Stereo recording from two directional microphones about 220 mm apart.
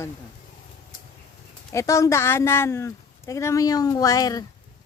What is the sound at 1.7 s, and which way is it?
A woman's voice, 15° left (ahead or behind).